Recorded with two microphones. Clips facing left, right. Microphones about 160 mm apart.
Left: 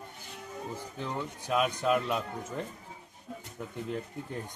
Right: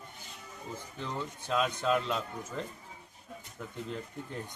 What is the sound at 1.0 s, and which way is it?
Speech, 15° left (ahead or behind).